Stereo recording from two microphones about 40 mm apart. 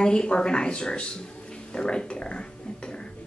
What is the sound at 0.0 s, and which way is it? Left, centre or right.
Speech, left.